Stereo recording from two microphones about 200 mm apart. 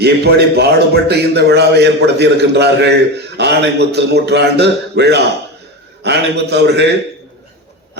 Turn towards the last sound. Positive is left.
turn(degrees=-55)  # may be behind; listen again after turning